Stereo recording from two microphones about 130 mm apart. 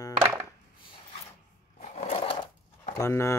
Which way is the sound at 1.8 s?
70° left (ahead or behind).